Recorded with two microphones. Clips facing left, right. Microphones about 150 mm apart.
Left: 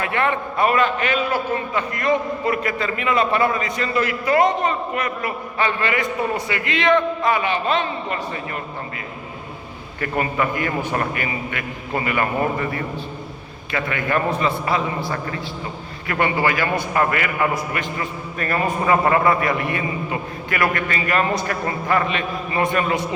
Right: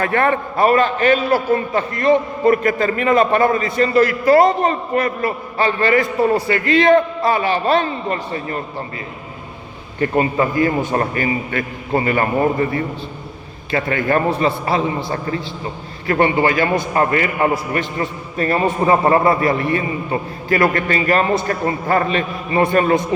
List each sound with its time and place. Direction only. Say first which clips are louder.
0.0 s a man's voice: right 5 dB; 40° right (ahead or behind)
10.0 s a man's voice: right 5 dB; 30° right (ahead or behind)
16.0 s a man's voice: right 5 dB; 30° right (ahead or behind)